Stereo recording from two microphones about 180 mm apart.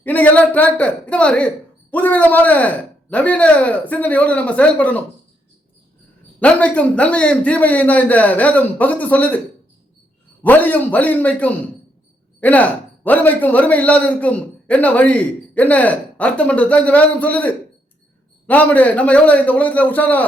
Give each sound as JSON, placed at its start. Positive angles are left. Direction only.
{"t": 0.0, "sound": "a man's voice", "side_deg": 10}
{"t": 6.4, "sound": "a man's voice", "side_deg": 5}
{"t": 10.4, "sound": "a man's voice", "side_deg": 10}